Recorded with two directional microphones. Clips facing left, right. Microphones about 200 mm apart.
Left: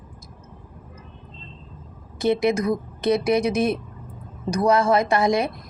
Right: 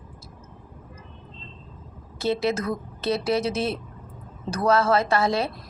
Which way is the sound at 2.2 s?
15° left (ahead or behind).